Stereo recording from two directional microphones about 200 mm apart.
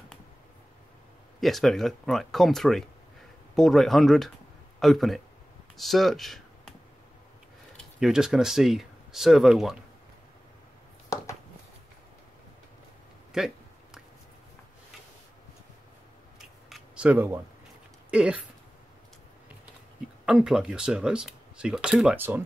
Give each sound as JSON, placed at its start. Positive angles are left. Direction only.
{"t": 1.4, "sound": "a man's voice", "side_deg": 0}
{"t": 7.7, "sound": "speech", "side_deg": 0}
{"t": 11.1, "sound": "a sound", "side_deg": 15}
{"t": 13.3, "sound": "speech", "side_deg": -5}
{"t": 16.3, "sound": "scissors", "side_deg": 0}
{"t": 18.1, "sound": "speech", "side_deg": -5}
{"t": 20.2, "sound": "speech", "side_deg": -5}